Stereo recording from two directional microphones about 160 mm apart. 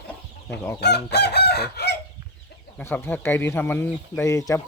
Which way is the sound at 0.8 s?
90° left.